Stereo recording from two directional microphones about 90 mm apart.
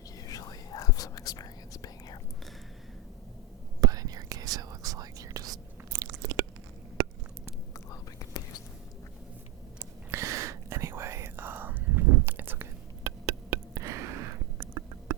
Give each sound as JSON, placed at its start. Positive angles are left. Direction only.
{"t": 0.2, "sound": "whispering", "side_deg": 40}
{"t": 3.8, "sound": "whispering", "side_deg": -45}
{"t": 9.7, "sound": "whispering", "side_deg": -30}
{"t": 13.1, "sound": "a sound", "side_deg": -35}